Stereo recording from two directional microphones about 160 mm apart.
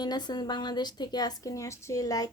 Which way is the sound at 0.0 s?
25° left (ahead or behind).